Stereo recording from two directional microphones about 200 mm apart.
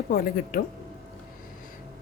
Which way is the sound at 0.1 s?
50° left (ahead or behind).